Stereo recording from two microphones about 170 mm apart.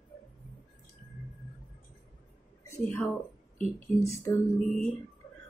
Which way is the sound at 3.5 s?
40° left (ahead or behind).